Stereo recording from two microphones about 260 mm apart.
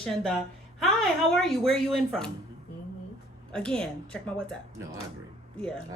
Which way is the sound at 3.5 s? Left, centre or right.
Centre.